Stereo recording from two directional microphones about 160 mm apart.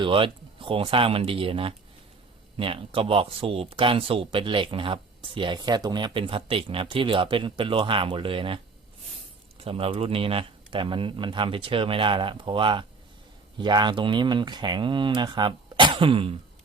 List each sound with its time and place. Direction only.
0.0 s speech: 35° right (ahead or behind)